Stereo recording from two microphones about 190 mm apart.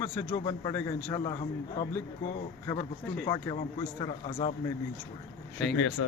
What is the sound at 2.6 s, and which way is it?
Speech, 20° left (ahead or behind).